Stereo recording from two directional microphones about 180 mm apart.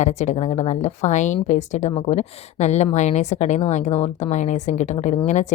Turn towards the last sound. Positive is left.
turn(degrees=40)  # may be behind; listen again after turning